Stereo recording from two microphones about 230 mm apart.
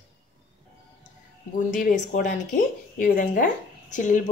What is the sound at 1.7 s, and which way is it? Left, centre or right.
Speech, left.